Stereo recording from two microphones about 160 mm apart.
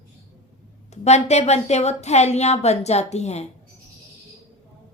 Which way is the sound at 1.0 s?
45° left (ahead or behind).